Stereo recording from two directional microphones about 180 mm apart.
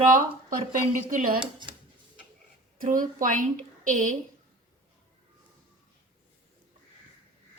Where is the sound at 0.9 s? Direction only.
50° right (ahead or behind).